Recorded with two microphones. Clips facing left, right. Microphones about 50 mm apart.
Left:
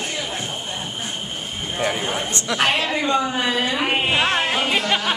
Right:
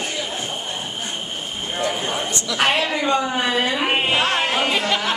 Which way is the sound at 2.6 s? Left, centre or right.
Centre.